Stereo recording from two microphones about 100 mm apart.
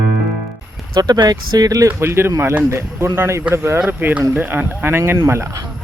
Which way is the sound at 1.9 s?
25° right (ahead or behind).